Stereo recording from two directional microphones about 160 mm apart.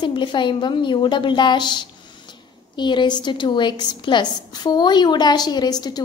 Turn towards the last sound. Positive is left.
turn(degrees=25)  # may be behind; listen again after turning